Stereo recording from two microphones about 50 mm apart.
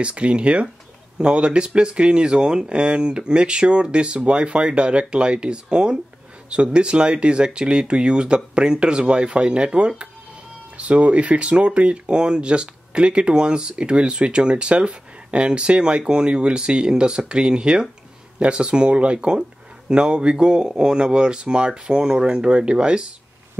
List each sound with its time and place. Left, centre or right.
0.0 s speech: right